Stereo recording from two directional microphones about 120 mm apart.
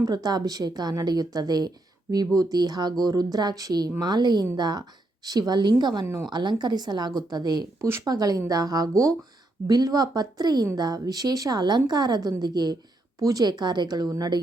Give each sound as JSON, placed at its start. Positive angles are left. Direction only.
{"t": 0.0, "sound": "a woman's voice", "side_deg": -35}